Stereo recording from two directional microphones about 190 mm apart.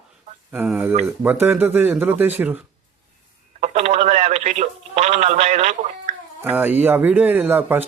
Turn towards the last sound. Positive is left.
turn(degrees=-10)  # may be behind; listen again after turning